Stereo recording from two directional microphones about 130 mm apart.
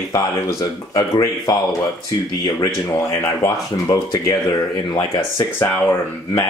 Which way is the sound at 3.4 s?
30° left (ahead or behind).